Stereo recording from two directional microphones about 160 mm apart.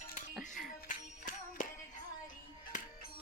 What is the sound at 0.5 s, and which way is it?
Music, 55° left (ahead or behind).